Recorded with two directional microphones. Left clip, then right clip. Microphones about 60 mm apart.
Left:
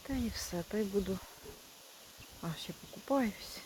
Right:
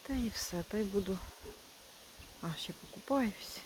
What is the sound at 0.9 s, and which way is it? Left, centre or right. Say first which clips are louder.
Speech: even; centre.